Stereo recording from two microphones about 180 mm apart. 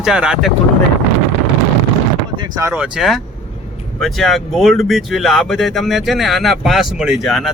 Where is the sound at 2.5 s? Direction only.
15° right (ahead or behind).